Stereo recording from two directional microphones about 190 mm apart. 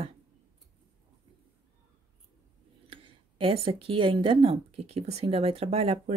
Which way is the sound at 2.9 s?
30° right (ahead or behind).